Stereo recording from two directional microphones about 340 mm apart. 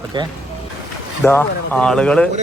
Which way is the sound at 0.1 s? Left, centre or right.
Centre.